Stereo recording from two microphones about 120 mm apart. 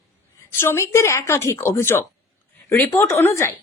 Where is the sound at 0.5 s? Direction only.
20° left (ahead or behind).